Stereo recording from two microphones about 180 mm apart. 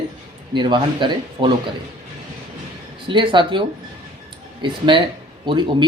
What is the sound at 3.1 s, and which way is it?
Speech, 25° right (ahead or behind).